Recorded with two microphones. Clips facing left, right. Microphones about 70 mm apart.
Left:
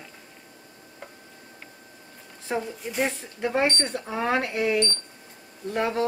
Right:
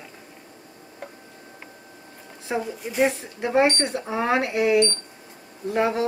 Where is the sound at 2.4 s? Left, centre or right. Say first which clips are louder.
Right 2 dB; centre.